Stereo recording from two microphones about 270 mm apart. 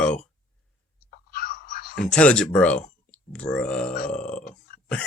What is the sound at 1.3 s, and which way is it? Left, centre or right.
Whispering, left.